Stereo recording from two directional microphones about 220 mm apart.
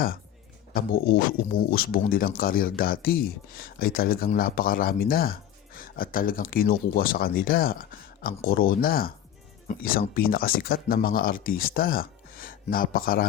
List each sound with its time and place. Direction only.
0.7 s speech: 40° left (ahead or behind)